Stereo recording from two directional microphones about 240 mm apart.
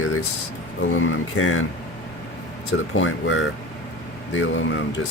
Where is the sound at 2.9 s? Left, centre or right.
Left.